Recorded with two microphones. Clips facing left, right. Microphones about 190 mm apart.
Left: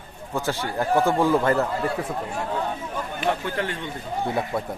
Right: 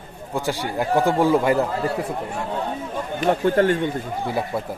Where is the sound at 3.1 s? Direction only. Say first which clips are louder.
Right 8 dB; 45° right (ahead or behind).